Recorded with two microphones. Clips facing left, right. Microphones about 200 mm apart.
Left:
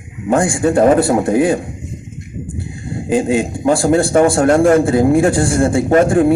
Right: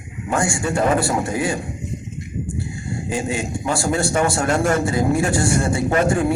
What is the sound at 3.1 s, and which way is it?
A man's voice, 55° left (ahead or behind).